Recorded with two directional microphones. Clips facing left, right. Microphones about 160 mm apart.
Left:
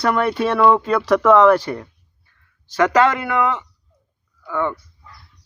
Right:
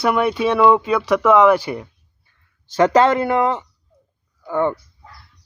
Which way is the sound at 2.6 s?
25° right (ahead or behind).